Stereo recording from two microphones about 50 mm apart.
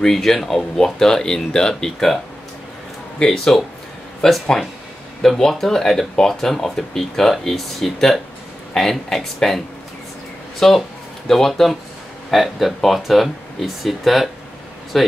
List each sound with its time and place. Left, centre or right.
0.0 s speech: centre
3.2 s speech: centre
10.6 s speech: centre